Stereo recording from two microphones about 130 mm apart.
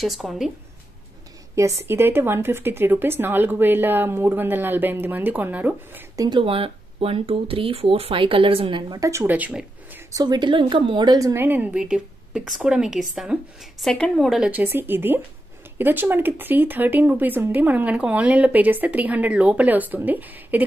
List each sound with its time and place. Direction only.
0.0 s a woman's voice: centre (ahead or behind)
1.5 s speech: 20° right (ahead or behind)
6.1 s speech: 35° right (ahead or behind)
9.2 s speech: 10° right (ahead or behind)
10.1 s a woman's voice: 30° right (ahead or behind)
11.3 s a woman's voice: 15° right (ahead or behind)
14.5 s speech: 15° right (ahead or behind)